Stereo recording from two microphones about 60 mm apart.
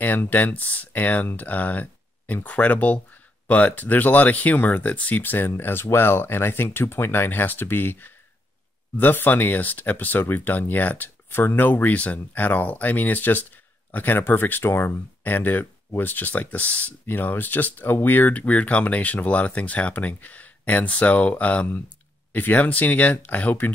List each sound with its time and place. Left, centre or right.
0.0 s speech: left